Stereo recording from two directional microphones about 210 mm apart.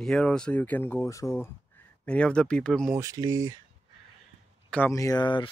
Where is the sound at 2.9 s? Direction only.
15° right (ahead or behind).